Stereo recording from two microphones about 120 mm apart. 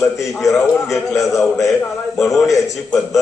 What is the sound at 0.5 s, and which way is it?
Speech, centre (ahead or behind).